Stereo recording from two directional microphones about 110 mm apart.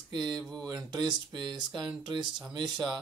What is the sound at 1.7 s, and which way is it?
Speech, 5° right (ahead or behind).